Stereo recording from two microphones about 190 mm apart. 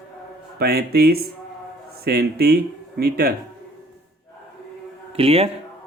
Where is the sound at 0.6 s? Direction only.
55° right (ahead or behind).